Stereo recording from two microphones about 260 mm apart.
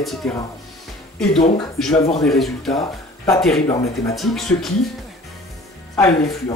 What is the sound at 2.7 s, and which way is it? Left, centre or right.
Speech, centre.